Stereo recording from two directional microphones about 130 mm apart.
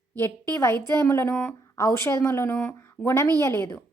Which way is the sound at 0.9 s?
20° left (ahead or behind).